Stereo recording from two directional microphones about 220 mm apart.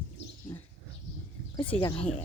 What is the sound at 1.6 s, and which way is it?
Speech, 25° left (ahead or behind).